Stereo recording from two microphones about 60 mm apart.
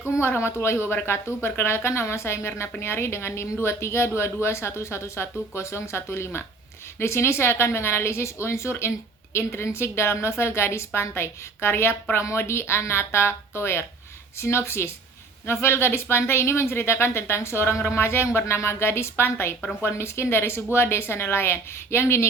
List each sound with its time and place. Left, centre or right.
0.2 s a woman's voice: left